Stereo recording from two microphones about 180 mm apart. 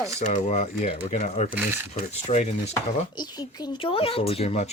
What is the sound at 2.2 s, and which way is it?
Speech, 40° left (ahead or behind).